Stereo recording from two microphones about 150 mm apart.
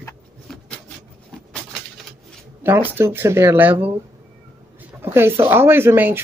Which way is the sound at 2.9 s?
15° right (ahead or behind).